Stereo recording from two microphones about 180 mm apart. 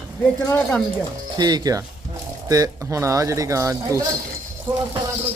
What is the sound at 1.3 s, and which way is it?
A man's voice, 20° right (ahead or behind).